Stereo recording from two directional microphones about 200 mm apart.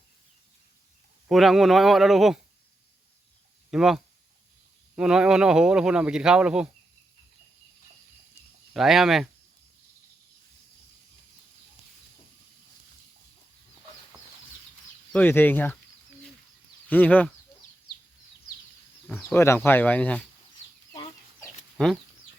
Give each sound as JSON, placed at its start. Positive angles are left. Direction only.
{"t": 1.3, "sound": "speech", "side_deg": 0}
{"t": 3.7, "sound": "speech", "side_deg": 0}
{"t": 8.7, "sound": "speech", "side_deg": 0}
{"t": 15.1, "sound": "speech", "side_deg": 10}
{"t": 16.9, "sound": "speech", "side_deg": 10}
{"t": 19.0, "sound": "speech", "side_deg": 10}
{"t": 20.9, "sound": "chicken", "side_deg": 20}